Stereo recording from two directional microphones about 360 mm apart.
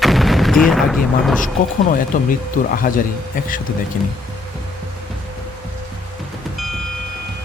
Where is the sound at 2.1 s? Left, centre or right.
Left.